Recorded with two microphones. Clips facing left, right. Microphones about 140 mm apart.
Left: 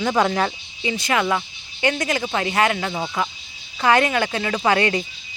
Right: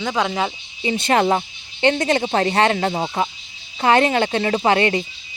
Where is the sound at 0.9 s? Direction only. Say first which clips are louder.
Right 4 dB; 30° right (ahead or behind).